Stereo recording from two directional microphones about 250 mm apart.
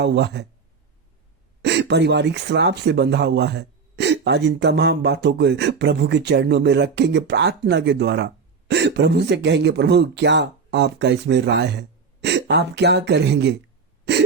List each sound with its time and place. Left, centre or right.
0.0 s speech: right
1.6 s speech: right